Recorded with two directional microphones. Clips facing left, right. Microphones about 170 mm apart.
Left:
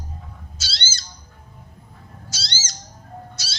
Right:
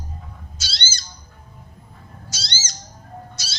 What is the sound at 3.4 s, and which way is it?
Cat, 20° right (ahead or behind).